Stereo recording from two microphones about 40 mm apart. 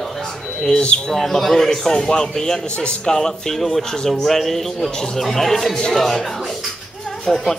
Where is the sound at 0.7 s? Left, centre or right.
Left.